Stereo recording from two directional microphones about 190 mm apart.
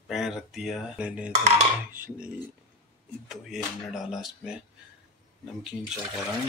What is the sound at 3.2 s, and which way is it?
Speech, centre (ahead or behind).